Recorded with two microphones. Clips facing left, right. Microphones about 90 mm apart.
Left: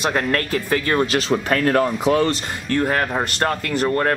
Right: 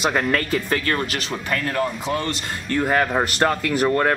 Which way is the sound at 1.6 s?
70° left (ahead or behind).